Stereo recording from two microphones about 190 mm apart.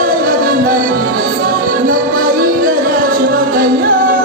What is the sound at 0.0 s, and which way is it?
Music, 45° right (ahead or behind).